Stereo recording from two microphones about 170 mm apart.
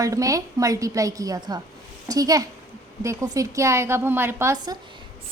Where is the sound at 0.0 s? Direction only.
20° right (ahead or behind).